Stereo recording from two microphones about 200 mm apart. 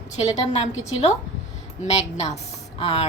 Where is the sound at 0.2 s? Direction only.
35° left (ahead or behind).